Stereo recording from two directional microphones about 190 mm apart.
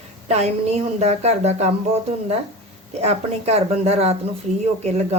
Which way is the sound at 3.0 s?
35° right (ahead or behind).